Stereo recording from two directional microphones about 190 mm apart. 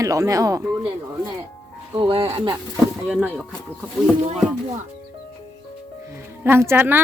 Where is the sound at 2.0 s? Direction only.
30° right (ahead or behind).